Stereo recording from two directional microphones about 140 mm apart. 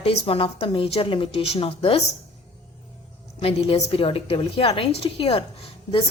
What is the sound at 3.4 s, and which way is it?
A woman's voice, 45° left (ahead or behind).